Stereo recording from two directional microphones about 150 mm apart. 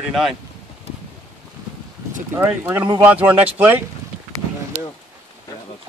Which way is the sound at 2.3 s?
15° right (ahead or behind).